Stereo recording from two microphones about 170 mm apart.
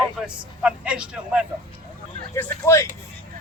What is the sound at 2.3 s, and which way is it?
Speech, 15° left (ahead or behind).